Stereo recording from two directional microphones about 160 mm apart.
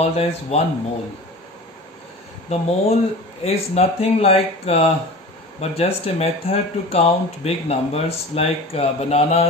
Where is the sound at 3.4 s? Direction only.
40° left (ahead or behind).